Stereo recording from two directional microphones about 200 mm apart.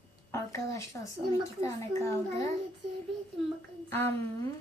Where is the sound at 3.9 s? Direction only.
10° left (ahead or behind).